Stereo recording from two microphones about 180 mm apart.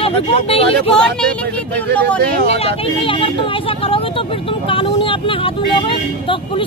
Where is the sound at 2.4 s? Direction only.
35° left (ahead or behind).